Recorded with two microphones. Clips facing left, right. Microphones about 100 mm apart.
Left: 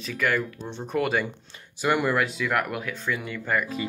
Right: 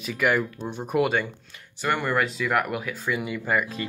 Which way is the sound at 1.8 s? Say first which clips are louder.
Left 1 dB; 5° left (ahead or behind).